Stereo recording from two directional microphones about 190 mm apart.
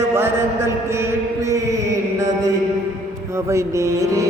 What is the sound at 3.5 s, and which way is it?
Music, 15° right (ahead or behind).